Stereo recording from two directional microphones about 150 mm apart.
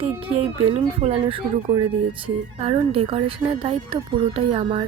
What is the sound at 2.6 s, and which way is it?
Speech, 40° right (ahead or behind).